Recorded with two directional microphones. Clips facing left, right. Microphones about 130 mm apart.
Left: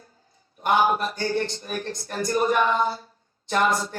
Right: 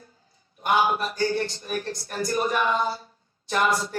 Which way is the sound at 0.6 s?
30° left (ahead or behind).